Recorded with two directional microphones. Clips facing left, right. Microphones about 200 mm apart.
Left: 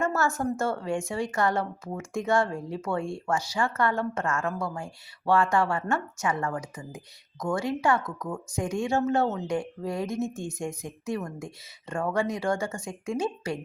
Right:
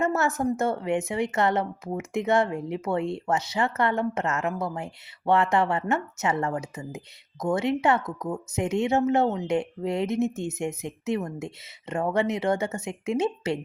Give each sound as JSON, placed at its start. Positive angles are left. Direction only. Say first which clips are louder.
{"t": 0.0, "sound": "a woman's voice", "louder": "right 2 dB", "side_deg": -20}